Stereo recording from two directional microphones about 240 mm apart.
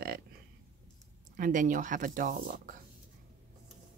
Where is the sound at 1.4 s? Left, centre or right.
Right.